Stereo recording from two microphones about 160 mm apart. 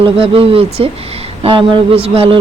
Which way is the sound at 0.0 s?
35° right (ahead or behind).